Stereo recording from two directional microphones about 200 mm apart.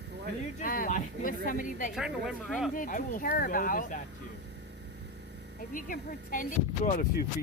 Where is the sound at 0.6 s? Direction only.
45° left (ahead or behind).